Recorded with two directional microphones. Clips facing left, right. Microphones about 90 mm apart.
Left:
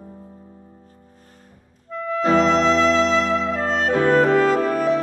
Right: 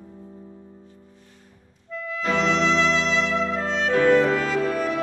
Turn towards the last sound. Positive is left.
turn(degrees=40)  # may be behind; listen again after turning